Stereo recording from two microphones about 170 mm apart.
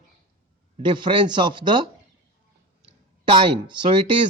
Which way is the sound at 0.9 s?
30° right (ahead or behind).